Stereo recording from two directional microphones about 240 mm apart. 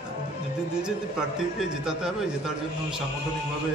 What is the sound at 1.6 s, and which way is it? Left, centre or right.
A man's voice, centre.